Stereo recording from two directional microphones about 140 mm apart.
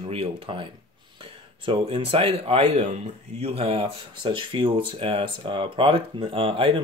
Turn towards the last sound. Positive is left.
turn(degrees=-40)  # may be behind; listen again after turning